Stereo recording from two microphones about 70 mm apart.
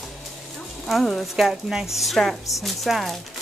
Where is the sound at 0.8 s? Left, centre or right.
Centre.